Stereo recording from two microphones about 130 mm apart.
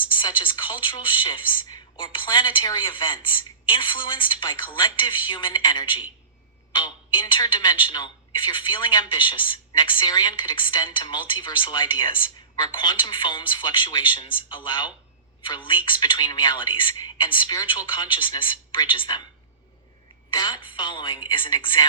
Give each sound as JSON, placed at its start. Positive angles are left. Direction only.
{"t": 0.1, "sound": "a woman's voice", "side_deg": 40}
{"t": 20.3, "sound": "a woman's voice", "side_deg": 35}